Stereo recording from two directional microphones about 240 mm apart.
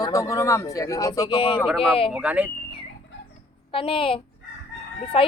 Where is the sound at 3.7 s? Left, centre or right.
Left.